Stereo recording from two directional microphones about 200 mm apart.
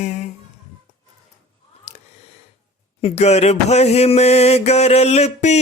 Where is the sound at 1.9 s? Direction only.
35° left (ahead or behind).